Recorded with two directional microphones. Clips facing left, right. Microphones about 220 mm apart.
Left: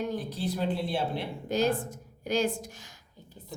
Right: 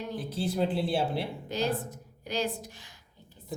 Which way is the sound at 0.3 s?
30° right (ahead or behind).